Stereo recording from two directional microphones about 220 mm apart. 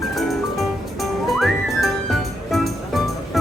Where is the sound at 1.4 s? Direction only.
Centre (ahead or behind).